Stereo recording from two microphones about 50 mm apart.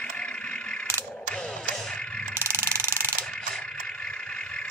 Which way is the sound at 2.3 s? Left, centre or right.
Right.